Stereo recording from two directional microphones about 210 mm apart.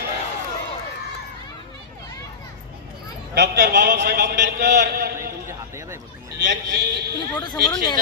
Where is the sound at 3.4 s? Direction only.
50° right (ahead or behind).